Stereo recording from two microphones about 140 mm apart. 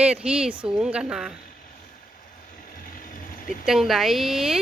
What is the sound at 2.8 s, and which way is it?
Vehicle, 90° left.